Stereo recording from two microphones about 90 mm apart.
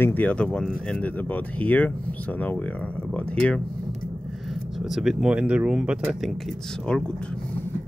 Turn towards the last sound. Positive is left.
turn(degrees=10)  # may be behind; listen again after turning